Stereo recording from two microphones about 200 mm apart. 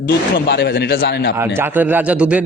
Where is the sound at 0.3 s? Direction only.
55° left (ahead or behind).